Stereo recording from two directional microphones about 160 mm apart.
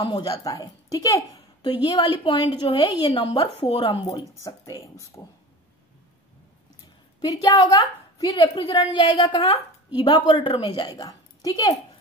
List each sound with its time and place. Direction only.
0.0 s a woman's voice: 25° left (ahead or behind)
4.4 s a woman's voice: 20° left (ahead or behind)
7.2 s a woman's voice: 25° left (ahead or behind)